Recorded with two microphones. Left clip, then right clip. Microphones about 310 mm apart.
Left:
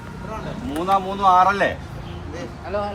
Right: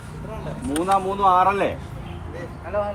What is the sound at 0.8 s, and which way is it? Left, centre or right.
Speech, left.